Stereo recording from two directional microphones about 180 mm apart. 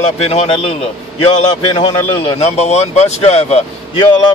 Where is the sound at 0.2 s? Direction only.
35° left (ahead or behind).